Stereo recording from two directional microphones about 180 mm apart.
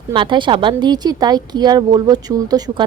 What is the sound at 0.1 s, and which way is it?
Speech, 25° right (ahead or behind).